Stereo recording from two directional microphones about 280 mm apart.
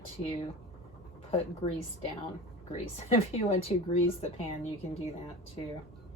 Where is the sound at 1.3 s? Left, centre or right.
Left.